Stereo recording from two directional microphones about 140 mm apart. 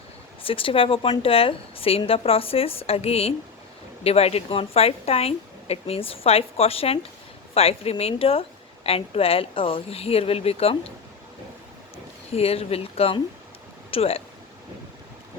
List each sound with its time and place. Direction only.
0.4 s a woman's voice: 40° left (ahead or behind)
12.3 s a woman's voice: 45° left (ahead or behind)